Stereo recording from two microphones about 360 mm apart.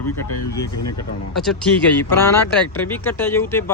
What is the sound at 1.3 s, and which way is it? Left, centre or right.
Speech, centre.